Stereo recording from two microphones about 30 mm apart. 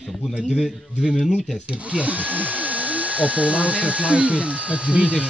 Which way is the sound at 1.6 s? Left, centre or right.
Right.